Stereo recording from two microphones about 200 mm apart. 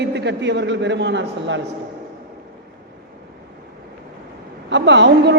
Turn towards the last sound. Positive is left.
turn(degrees=-60)  # may be behind; listen again after turning